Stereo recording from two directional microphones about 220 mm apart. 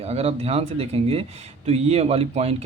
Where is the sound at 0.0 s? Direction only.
30° right (ahead or behind).